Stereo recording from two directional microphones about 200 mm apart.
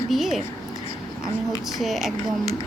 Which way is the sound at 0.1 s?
Centre (ahead or behind).